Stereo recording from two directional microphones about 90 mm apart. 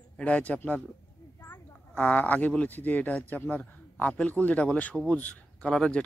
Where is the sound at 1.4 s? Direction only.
25° left (ahead or behind).